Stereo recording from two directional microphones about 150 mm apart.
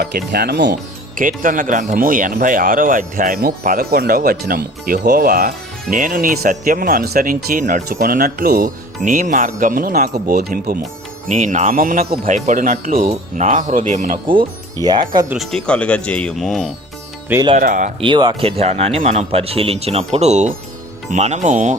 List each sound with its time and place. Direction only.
0.3 s speech: 90° right
11.3 s speech: 55° right (ahead or behind); by 12.0 s 70° right (ahead or behind)
12.1 s speech: 50° right (ahead or behind); by 13.1 s 70° right (ahead or behind)
13.1 s speech: 55° right (ahead or behind)
14.3 s speech: 30° right (ahead or behind)
15.4 s speech: 5° left (ahead or behind)
17.6 s speech: 60° right (ahead or behind)
18.0 s speech: 30° right (ahead or behind); by 21.8 s 55° right (ahead or behind)